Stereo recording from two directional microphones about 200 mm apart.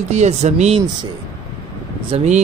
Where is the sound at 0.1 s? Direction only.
35° right (ahead or behind).